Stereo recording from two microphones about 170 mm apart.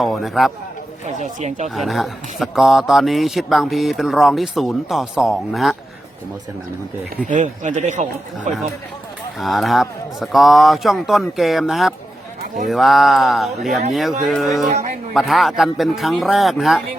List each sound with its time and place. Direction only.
0.0 s a man's voice: centre (ahead or behind)
1.0 s speech: 45° right (ahead or behind)
1.7 s a man's voice: centre (ahead or behind)
7.3 s speech: 45° right (ahead or behind)
9.4 s a man's voice: centre (ahead or behind)
14.7 s speech: 40° right (ahead or behind)
15.1 s a man's voice: centre (ahead or behind)